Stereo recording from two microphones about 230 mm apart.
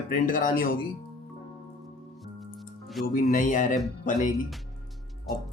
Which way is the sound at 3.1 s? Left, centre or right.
Left.